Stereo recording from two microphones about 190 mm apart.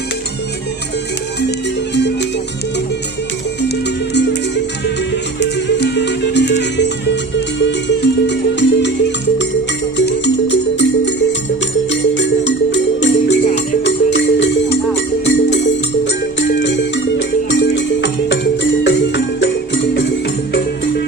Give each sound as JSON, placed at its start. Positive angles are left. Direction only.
{"t": 4.1, "sound": "music", "side_deg": 65}
{"t": 5.4, "sound": "music", "side_deg": 65}
{"t": 16.6, "sound": "music", "side_deg": 70}